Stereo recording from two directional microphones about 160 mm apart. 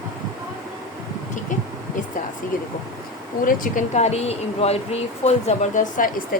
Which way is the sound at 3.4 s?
55° left (ahead or behind).